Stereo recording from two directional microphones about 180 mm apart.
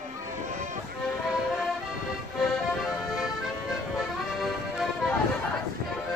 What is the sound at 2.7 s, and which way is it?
Music, centre (ahead or behind).